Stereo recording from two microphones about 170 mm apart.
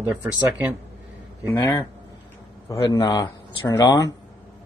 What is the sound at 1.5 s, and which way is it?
Speech, 25° left (ahead or behind).